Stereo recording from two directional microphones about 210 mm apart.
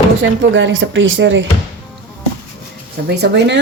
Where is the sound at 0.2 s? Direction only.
65° right (ahead or behind).